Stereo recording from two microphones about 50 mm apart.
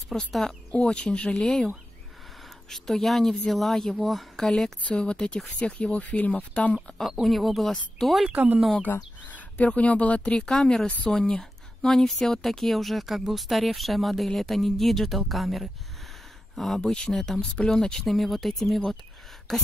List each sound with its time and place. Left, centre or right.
0.3 s speech: centre
0.7 s a woman's voice: centre
2.7 s a woman's voice: centre
4.8 s speech: centre
7.0 s a woman's voice: centre
8.9 s speech: left
9.7 s speech: left
10.4 s a woman's voice: centre